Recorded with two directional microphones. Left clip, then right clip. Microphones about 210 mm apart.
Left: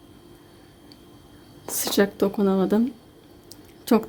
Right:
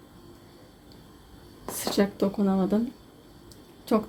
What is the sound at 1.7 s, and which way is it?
Speech, 25° left (ahead or behind).